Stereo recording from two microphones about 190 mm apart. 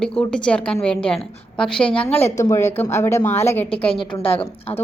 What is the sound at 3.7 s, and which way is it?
Speech, 30° left (ahead or behind).